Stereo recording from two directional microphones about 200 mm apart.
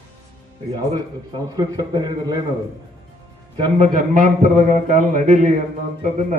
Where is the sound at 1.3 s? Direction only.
20° right (ahead or behind).